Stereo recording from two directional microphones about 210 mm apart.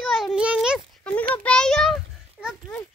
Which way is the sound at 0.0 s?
Centre (ahead or behind).